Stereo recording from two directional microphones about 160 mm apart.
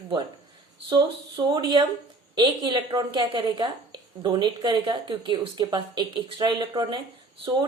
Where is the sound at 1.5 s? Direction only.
30° right (ahead or behind).